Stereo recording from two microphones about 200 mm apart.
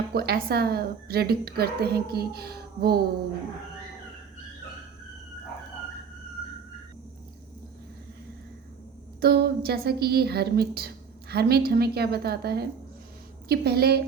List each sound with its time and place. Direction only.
0.1 s a woman's voice: 50° right (ahead or behind)
9.2 s a woman's voice: 55° right (ahead or behind)